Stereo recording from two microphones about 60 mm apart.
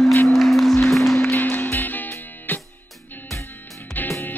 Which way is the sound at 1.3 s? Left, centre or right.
Left.